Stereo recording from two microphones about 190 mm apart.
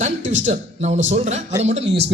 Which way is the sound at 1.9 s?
60° right (ahead or behind).